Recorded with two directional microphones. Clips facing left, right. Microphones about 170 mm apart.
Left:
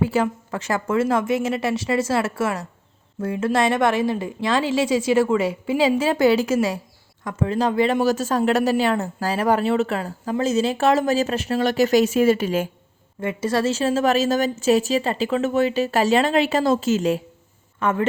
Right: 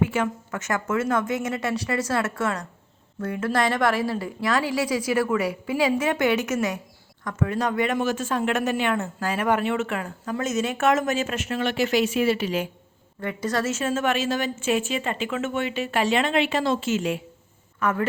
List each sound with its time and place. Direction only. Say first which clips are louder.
0.0 s a woman's voice: left 3 dB; 35° left (ahead or behind)
13.1 s speech: left 4 dB; 20° left (ahead or behind); by 17.2 s 40° left (ahead or behind)
17.7 s speech: left 3 dB; 25° left (ahead or behind)